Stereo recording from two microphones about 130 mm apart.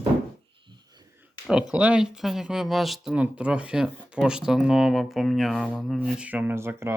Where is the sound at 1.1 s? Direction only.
10° right (ahead or behind).